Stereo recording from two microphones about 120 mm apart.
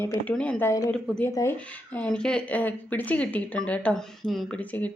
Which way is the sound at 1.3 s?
25° left (ahead or behind).